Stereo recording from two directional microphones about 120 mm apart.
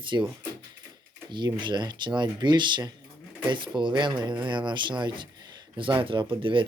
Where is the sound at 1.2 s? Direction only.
40° right (ahead or behind).